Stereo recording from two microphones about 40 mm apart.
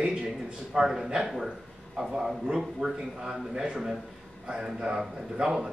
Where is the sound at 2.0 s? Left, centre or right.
Centre.